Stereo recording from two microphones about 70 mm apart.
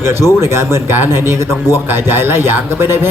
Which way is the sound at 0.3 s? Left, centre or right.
Right.